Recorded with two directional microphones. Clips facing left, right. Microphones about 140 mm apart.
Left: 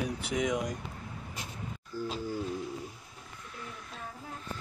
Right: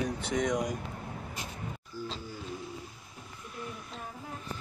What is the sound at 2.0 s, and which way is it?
Speech, 50° left (ahead or behind).